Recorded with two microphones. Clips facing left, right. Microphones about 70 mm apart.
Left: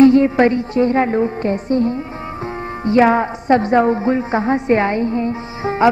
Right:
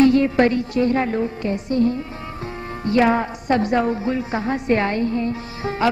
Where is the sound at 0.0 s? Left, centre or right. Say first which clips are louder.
Left 4 dB; left.